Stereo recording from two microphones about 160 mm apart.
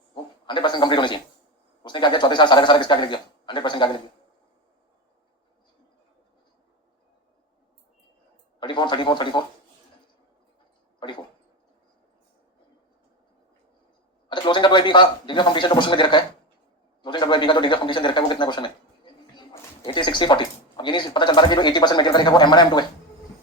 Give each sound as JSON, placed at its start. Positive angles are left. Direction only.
{"t": 0.1, "sound": "speech", "side_deg": 30}
{"t": 8.5, "sound": "speech", "side_deg": 30}
{"t": 14.3, "sound": "speech", "side_deg": 30}